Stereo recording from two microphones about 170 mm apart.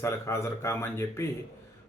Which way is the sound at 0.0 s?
15° left (ahead or behind).